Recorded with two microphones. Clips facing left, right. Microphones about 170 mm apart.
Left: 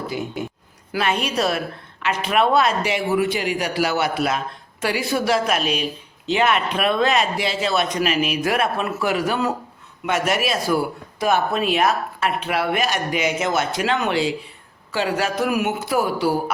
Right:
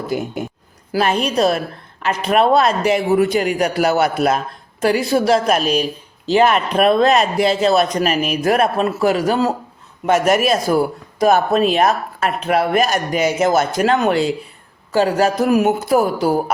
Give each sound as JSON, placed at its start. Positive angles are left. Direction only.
{"t": 0.1, "sound": "speech", "side_deg": -50}
{"t": 0.9, "sound": "a woman's voice", "side_deg": -35}